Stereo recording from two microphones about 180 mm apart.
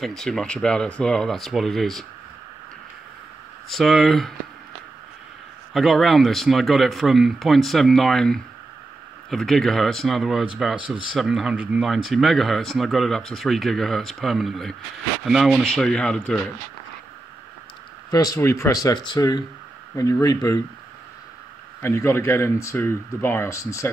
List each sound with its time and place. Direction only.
0.0 s speech: centre (ahead or behind)
3.7 s speech: centre (ahead or behind)
5.7 s speech: centre (ahead or behind)
18.1 s speech: 20° left (ahead or behind)
21.8 s speech: 15° left (ahead or behind)